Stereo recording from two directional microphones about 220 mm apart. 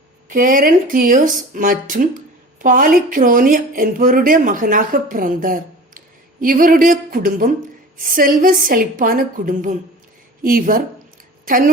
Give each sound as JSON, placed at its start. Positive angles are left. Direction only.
{"t": 0.3, "sound": "speech", "side_deg": -40}